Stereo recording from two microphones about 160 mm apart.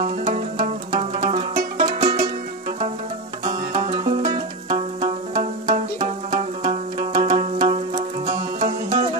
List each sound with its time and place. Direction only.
0.0 s music: 60° right (ahead or behind)
0.7 s music: 45° right (ahead or behind)
3.4 s music: 40° right (ahead or behind)